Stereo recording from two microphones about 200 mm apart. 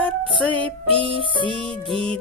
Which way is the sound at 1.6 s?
25° left (ahead or behind).